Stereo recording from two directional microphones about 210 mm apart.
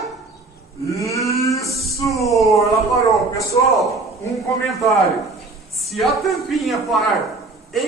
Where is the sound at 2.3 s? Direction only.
Centre (ahead or behind).